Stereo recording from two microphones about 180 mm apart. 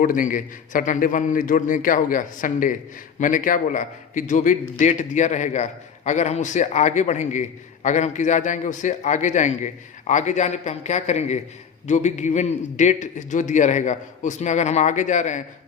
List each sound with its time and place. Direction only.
0.0 s a man's voice: 50° left (ahead or behind)